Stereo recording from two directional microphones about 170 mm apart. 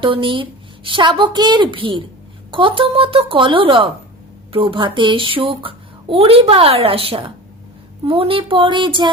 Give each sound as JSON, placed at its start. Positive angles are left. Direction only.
{"t": 0.0, "sound": "a woman's voice", "side_deg": -30}